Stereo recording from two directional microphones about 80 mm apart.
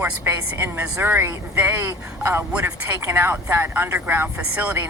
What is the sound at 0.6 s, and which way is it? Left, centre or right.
Speech, right.